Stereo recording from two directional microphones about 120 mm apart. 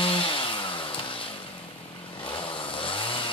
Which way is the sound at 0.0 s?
45° left (ahead or behind).